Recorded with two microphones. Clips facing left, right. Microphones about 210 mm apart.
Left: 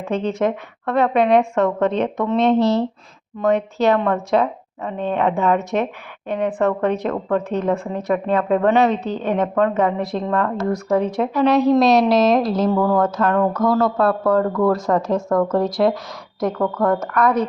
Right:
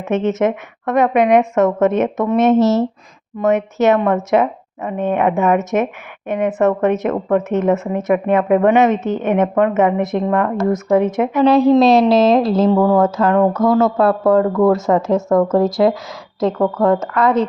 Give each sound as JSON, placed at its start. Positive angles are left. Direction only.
{"t": 0.0, "sound": "a woman's voice", "side_deg": -20}